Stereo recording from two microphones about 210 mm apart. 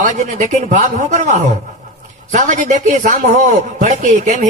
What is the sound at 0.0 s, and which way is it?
A man's voice, 35° right (ahead or behind).